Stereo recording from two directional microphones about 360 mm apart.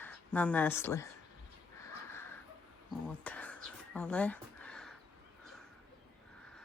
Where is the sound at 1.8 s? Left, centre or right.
Centre.